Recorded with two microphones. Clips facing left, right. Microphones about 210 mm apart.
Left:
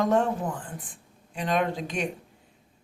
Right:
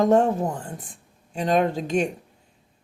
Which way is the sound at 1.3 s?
40° right (ahead or behind).